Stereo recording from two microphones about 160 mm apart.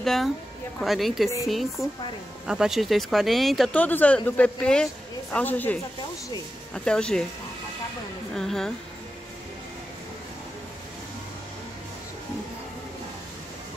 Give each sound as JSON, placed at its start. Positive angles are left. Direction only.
{"t": 0.0, "sound": "a woman's voice", "side_deg": 0}
{"t": 8.4, "sound": "speech", "side_deg": 0}